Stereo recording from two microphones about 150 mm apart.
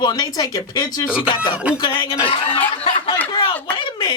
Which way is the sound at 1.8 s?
30° left (ahead or behind).